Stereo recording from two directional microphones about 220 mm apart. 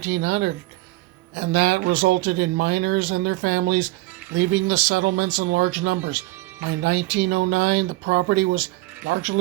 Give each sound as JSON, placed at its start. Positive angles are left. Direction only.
{"t": 0.1, "sound": "speech", "side_deg": -45}